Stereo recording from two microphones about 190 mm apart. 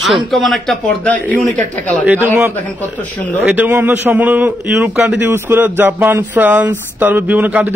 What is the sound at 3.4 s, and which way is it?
A man's voice, 10° right (ahead or behind).